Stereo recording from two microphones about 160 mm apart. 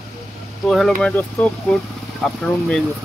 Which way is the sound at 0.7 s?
5° left (ahead or behind).